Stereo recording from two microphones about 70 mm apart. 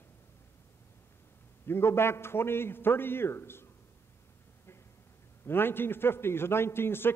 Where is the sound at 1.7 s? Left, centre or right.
Left.